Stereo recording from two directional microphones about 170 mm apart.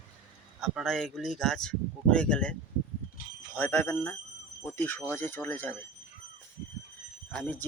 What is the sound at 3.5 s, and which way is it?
Speech, 10° left (ahead or behind).